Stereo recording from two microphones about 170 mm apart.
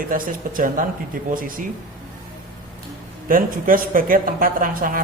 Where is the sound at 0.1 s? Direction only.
55° right (ahead or behind).